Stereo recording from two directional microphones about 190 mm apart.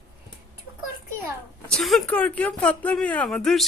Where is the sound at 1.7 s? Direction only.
Centre (ahead or behind).